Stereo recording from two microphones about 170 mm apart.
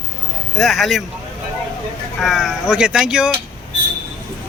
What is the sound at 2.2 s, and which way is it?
Speech, centre (ahead or behind).